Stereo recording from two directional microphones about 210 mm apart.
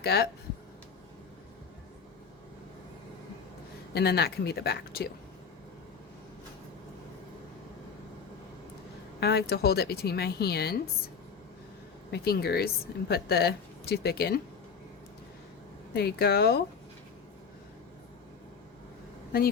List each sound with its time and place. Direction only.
0.0 s speech: 50° left (ahead or behind)
3.9 s a woman's voice: 50° left (ahead or behind)
9.2 s a woman's voice: 50° left (ahead or behind)
12.1 s a woman's voice: 50° left (ahead or behind)
15.9 s a woman's voice: 50° left (ahead or behind)